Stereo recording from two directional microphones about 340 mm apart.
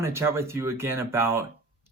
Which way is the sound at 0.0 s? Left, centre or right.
Centre.